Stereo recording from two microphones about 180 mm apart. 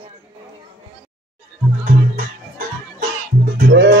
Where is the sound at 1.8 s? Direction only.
45° right (ahead or behind).